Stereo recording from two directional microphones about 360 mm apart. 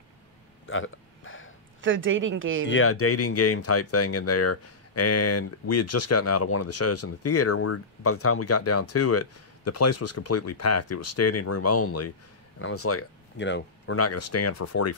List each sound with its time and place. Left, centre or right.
0.7 s hiccup: left
1.8 s speech: right
2.7 s speech: left